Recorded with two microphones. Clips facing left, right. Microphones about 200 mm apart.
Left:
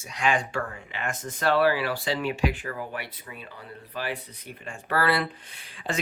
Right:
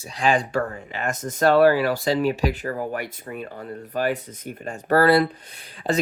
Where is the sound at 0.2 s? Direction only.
35° right (ahead or behind).